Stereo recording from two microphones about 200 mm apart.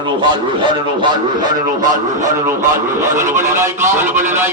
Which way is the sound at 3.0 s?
10° right (ahead or behind).